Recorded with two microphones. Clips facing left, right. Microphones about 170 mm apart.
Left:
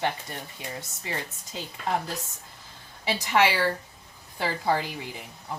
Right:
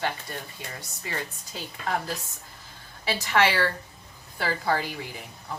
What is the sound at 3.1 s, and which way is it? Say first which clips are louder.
A woman's voice: even; 15° left (ahead or behind).